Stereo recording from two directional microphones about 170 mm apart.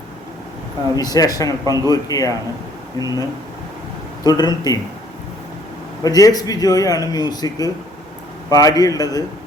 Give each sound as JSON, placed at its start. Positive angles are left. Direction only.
{"t": 0.9, "sound": "a man's voice", "side_deg": 20}
{"t": 1.5, "sound": "a man's voice", "side_deg": -20}
{"t": 1.9, "sound": "a man's voice", "side_deg": 20}
{"t": 4.2, "sound": "a man's voice", "side_deg": 25}
{"t": 6.0, "sound": "a man's voice", "side_deg": 20}